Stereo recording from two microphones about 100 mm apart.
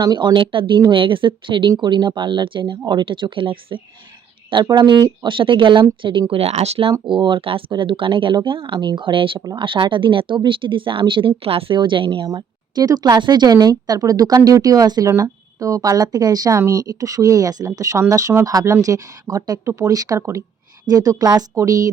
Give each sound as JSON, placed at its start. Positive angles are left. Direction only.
{"t": 0.0, "sound": "speech", "side_deg": -45}
{"t": 4.5, "sound": "speech", "side_deg": -50}
{"t": 5.3, "sound": "speech", "side_deg": -55}
{"t": 7.1, "sound": "a woman's voice", "side_deg": -55}